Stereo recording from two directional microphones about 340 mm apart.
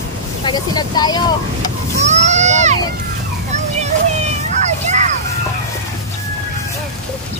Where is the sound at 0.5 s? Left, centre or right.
Centre.